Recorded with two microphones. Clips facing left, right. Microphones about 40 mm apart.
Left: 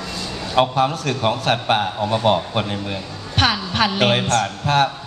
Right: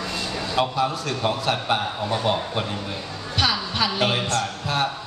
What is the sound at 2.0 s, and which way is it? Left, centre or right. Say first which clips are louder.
Speech: left 5 dB; left.